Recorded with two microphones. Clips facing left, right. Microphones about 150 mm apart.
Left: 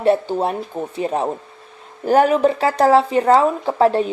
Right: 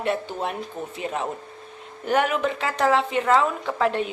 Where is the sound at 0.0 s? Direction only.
35° left (ahead or behind).